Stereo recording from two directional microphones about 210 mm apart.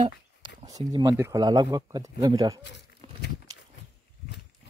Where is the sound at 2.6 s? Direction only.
55° left (ahead or behind).